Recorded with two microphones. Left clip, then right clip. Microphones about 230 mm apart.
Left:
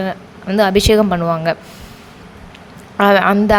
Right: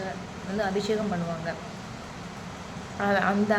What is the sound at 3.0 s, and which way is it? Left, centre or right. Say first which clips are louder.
Speech: left 13 dB; left.